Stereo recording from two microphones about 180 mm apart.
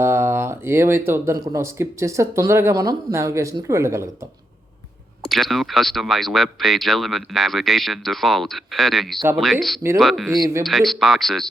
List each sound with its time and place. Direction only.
0.0 s speech: 15° right (ahead or behind)
5.3 s speech: centre (ahead or behind)
10.3 s speech: 20° right (ahead or behind)
10.6 s speech: centre (ahead or behind)